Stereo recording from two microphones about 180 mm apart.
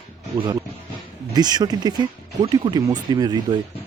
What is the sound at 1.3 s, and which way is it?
Speech, 20° right (ahead or behind).